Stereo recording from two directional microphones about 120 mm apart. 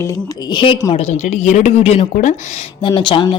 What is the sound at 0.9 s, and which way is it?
Speech, 70° left (ahead or behind).